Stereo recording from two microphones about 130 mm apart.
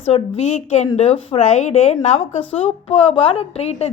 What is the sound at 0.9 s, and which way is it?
A woman's voice, 50° left (ahead or behind).